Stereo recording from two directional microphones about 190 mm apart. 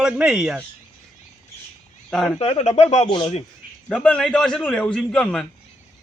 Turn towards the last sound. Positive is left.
turn(degrees=5)  # may be behind; listen again after turning